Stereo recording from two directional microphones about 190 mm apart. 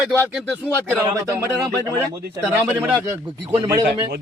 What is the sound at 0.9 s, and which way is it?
Speech, 10° right (ahead or behind).